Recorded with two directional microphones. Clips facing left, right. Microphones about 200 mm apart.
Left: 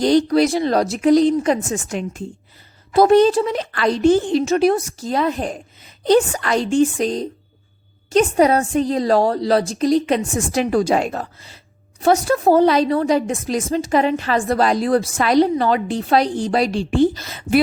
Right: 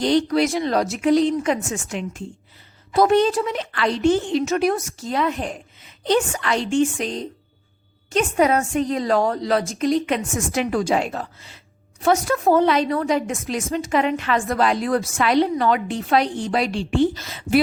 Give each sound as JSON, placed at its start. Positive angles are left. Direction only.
{"t": 0.0, "sound": "a woman's voice", "side_deg": 40}